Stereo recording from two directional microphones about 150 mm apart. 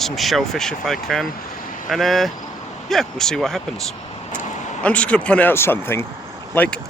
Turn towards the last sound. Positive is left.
turn(degrees=10)  # may be behind; listen again after turning